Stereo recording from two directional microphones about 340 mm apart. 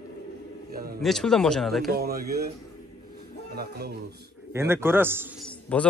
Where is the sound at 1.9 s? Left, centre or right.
Right.